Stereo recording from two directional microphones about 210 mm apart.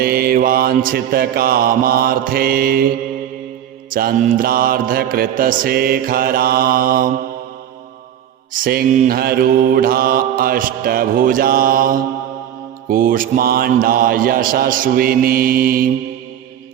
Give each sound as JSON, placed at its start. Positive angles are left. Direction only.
{"t": 0.0, "sound": "mantra", "side_deg": -45}
{"t": 8.5, "sound": "mantra", "side_deg": -40}